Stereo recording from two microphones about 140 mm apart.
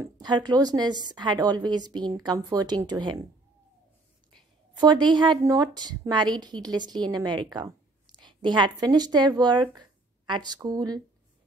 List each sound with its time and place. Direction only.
0.0 s a woman's voice: 30° right (ahead or behind)
4.7 s a woman's voice: 30° right (ahead or behind)